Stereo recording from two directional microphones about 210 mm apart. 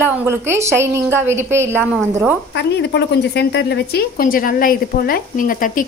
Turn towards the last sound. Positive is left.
turn(degrees=40)  # may be behind; listen again after turning